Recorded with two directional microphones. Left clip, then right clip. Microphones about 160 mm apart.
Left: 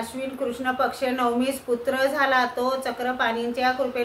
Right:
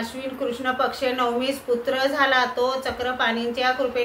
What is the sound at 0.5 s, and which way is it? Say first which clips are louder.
A woman's voice: right 1 dB; 25° left (ahead or behind).